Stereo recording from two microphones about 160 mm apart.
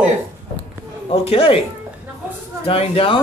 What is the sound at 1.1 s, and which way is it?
Speech, 35° left (ahead or behind).